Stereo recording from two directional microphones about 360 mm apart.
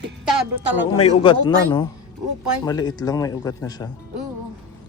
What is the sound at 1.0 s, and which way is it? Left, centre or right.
Speech, centre.